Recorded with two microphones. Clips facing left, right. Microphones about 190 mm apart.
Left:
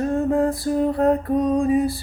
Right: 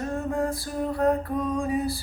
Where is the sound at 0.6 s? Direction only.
25° left (ahead or behind).